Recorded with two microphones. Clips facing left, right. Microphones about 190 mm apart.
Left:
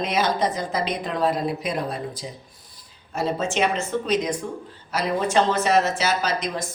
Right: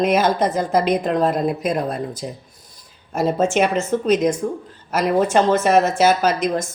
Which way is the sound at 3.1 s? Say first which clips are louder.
Right 6 dB; 50° right (ahead or behind).